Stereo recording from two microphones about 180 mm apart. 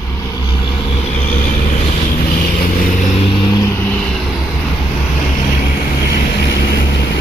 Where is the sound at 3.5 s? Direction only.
15° left (ahead or behind).